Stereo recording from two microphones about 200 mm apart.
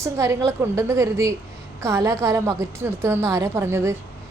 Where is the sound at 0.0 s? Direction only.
15° right (ahead or behind).